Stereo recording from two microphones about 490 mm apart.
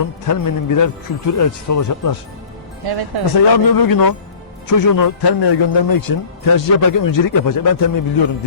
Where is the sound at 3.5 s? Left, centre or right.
Left.